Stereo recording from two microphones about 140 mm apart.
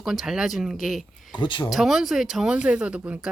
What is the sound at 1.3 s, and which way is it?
Speech, 35° left (ahead or behind).